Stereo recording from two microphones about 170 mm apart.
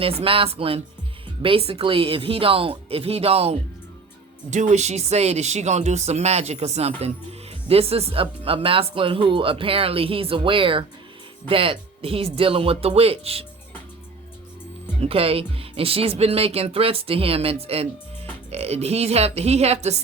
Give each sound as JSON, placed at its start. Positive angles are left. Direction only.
{"t": 0.0, "sound": "speech", "side_deg": -35}
{"t": 15.0, "sound": "speech", "side_deg": -35}